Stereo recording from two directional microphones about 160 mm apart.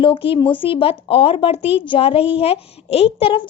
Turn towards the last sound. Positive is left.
turn(degrees=35)  # may be behind; listen again after turning